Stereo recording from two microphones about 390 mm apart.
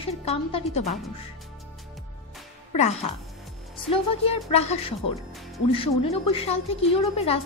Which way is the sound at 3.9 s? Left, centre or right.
Centre.